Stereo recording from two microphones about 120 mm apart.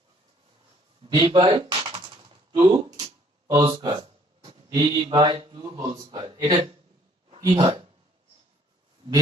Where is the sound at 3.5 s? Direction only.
40° right (ahead or behind).